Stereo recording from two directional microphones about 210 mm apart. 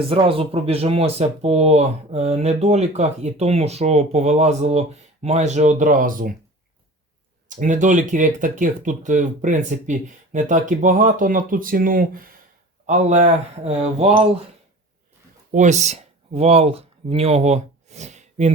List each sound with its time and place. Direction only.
0.1 s speech: 25° right (ahead or behind)
7.4 s speech: 35° right (ahead or behind)
15.5 s speech: 35° right (ahead or behind)